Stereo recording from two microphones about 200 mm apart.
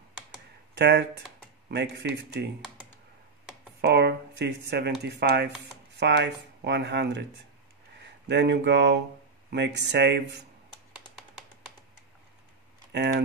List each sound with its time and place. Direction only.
0.7 s speech: 55° right (ahead or behind)
3.8 s speech: 55° right (ahead or behind)
12.9 s speech: 60° right (ahead or behind)